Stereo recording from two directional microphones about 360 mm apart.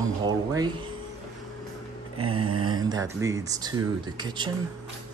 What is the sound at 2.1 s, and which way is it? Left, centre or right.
Mantra, right.